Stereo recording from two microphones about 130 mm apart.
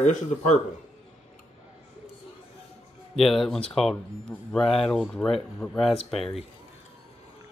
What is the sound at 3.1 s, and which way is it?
Speech, centre (ahead or behind).